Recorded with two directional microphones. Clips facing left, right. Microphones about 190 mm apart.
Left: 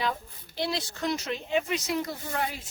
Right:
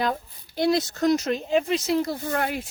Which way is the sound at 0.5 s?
45° right (ahead or behind).